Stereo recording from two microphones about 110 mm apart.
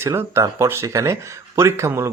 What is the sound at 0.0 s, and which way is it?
Speech, 25° right (ahead or behind).